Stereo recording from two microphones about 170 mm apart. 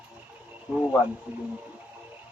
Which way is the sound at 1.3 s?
5° right (ahead or behind).